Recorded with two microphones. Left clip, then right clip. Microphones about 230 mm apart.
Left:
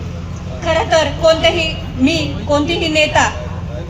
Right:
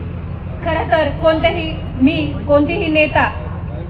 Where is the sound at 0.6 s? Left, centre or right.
Left.